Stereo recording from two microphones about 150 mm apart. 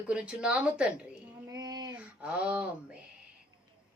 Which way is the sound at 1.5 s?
25° right (ahead or behind).